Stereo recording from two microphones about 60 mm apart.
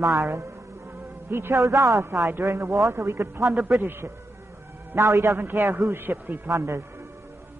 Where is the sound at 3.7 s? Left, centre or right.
Centre.